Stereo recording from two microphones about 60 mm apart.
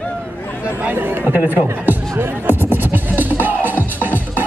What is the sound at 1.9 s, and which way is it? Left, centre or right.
Music, right.